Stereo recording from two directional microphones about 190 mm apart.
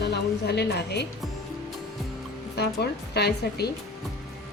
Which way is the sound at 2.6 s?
60° left (ahead or behind).